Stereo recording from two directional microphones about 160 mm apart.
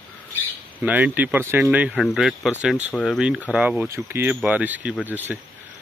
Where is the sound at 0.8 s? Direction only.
10° right (ahead or behind); by 3.2 s 5° left (ahead or behind).